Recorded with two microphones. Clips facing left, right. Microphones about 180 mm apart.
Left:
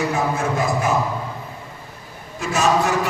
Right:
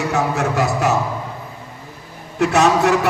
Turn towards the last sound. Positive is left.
turn(degrees=-65)  # may be behind; listen again after turning